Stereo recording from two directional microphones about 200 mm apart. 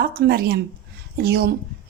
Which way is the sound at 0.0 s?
50° right (ahead or behind).